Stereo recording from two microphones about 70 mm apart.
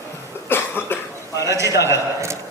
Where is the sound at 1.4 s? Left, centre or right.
Right.